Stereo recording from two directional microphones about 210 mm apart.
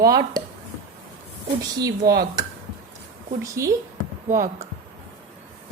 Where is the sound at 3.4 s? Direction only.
15° right (ahead or behind).